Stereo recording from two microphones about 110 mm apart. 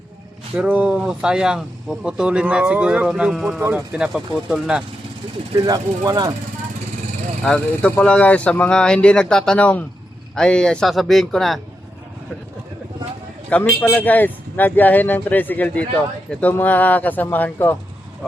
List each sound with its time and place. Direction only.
0.6 s speech: 10° right (ahead or behind)
5.6 s speech: 35° right (ahead or behind)
7.4 s speech: 10° left (ahead or behind)
13.5 s speech: 15° left (ahead or behind)